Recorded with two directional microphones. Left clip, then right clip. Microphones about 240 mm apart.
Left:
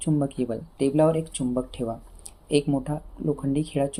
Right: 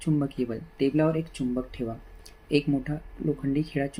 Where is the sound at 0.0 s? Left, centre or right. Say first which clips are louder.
Left 2 dB; centre.